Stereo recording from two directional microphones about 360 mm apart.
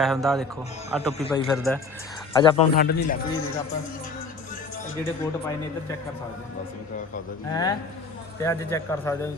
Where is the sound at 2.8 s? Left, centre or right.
Left.